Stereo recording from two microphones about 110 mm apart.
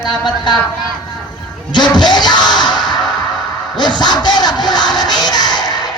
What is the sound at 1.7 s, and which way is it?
Music, 40° left (ahead or behind).